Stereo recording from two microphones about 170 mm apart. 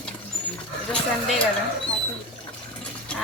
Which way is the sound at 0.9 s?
5° left (ahead or behind).